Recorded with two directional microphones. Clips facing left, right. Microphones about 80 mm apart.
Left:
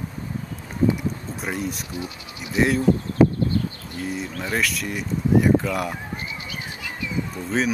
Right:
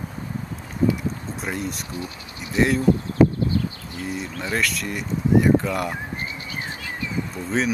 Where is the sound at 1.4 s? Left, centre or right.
Centre.